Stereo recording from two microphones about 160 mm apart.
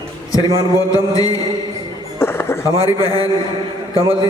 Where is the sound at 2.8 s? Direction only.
25° left (ahead or behind).